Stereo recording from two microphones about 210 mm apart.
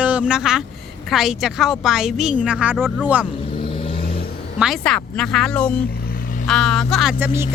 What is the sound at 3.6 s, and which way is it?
Vehicle, 25° left (ahead or behind).